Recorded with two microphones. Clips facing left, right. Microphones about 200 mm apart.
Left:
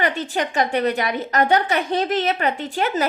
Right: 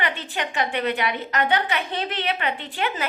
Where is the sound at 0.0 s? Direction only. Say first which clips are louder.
Left 6 dB; 40° left (ahead or behind).